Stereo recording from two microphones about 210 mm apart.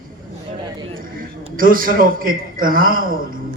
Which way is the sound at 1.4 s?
40° right (ahead or behind).